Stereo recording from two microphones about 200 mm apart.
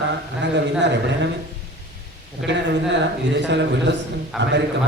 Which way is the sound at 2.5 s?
60° right (ahead or behind).